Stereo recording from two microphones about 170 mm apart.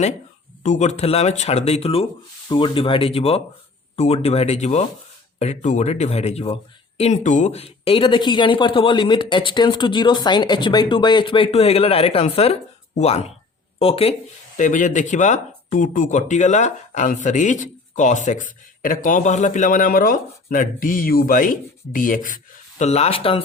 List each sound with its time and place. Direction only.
0.6 s speech: 45° left (ahead or behind)
22.8 s speech: 40° left (ahead or behind)